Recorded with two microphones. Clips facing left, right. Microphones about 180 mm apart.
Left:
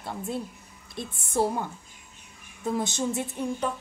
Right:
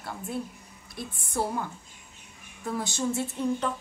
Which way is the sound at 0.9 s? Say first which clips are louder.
Left 4 dB; 25° left (ahead or behind).